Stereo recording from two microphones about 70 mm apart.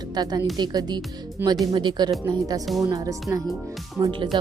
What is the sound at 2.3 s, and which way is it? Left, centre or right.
Speech, right.